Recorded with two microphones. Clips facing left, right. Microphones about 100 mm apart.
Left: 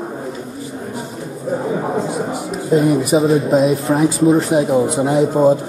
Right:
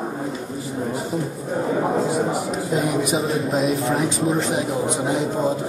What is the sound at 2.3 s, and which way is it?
Speech, centre (ahead or behind).